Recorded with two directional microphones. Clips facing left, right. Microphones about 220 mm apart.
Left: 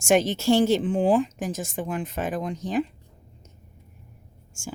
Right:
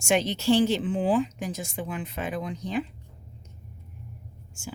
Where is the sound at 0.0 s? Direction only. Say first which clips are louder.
Left 4 dB; 45° left (ahead or behind).